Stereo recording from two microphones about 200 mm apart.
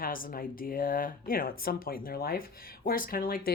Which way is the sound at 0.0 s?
45° left (ahead or behind).